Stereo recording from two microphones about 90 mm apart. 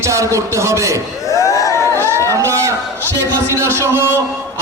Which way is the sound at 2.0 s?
30° right (ahead or behind).